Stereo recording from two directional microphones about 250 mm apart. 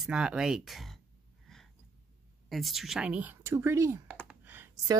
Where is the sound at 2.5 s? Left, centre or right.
Centre.